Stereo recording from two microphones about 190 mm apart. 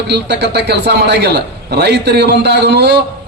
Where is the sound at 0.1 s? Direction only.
60° right (ahead or behind).